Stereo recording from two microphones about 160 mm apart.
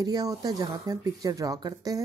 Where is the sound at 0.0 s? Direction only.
25° right (ahead or behind).